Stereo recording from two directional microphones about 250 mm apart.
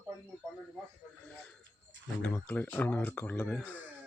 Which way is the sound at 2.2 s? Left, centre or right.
Centre.